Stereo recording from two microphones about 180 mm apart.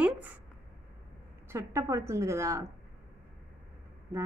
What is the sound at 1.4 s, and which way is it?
A woman's voice, 15° right (ahead or behind).